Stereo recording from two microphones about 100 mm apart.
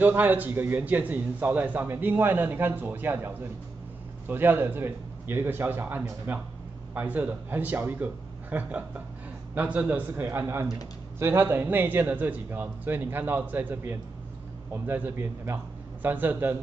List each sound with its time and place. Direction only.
0.0 s a man's voice: 20° right (ahead or behind)